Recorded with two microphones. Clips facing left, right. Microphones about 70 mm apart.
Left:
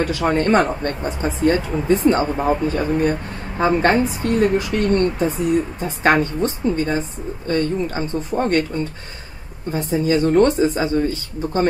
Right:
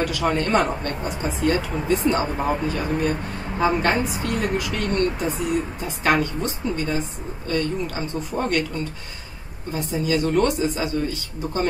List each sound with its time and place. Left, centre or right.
0.0 s a woman's voice: left